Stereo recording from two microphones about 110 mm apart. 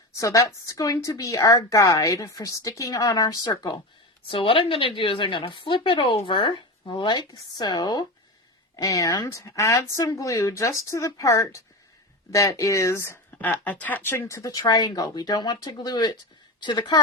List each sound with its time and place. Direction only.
0.2 s a woman's voice: 30° left (ahead or behind)
4.3 s a woman's voice: 55° left (ahead or behind); by 14.5 s 30° left (ahead or behind)
14.5 s a woman's voice: 40° left (ahead or behind)